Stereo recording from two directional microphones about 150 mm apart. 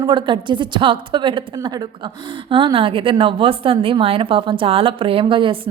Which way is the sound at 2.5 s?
35° right (ahead or behind).